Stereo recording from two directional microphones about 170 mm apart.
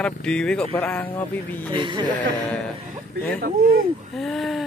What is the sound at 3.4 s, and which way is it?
Speech, 60° right (ahead or behind).